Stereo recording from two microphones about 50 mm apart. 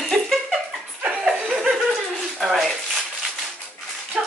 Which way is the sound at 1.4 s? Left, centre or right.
Right.